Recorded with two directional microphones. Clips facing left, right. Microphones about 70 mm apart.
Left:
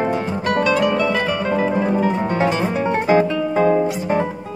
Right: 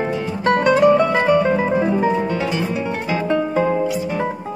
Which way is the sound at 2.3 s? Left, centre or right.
Left.